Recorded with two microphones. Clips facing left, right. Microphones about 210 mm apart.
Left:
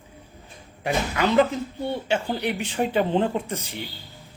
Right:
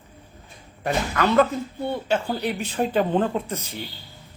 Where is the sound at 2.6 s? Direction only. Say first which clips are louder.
Right 1 dB; 15° left (ahead or behind).